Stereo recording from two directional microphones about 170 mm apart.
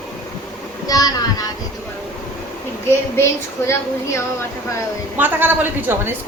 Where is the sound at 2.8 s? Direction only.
15° left (ahead or behind).